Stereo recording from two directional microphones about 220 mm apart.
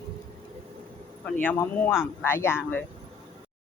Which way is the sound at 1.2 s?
5° left (ahead or behind).